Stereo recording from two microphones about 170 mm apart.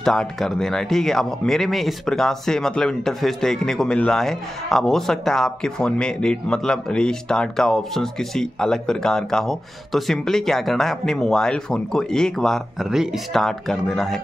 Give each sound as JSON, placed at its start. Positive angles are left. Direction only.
{"t": 0.0, "sound": "speech", "side_deg": 5}